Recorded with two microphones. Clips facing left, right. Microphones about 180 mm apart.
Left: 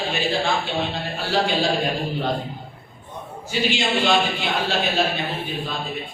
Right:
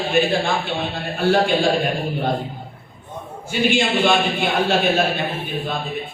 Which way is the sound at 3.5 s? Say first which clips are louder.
Right 4 dB; 50° right (ahead or behind).